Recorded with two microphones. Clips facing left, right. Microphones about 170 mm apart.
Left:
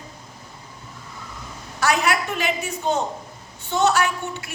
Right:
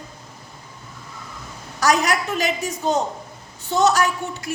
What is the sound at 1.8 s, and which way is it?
A woman's voice, 40° right (ahead or behind).